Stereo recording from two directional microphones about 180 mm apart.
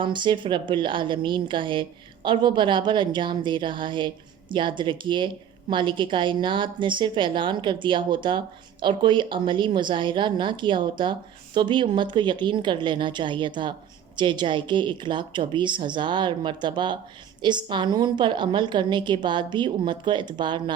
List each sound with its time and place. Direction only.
0.0 s a woman's voice: 25° right (ahead or behind)